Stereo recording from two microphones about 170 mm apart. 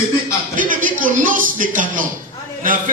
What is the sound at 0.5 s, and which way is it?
A man's voice, 50° right (ahead or behind).